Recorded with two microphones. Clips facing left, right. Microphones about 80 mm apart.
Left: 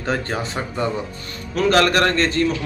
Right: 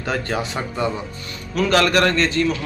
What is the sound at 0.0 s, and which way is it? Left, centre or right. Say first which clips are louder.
Speech: even; left.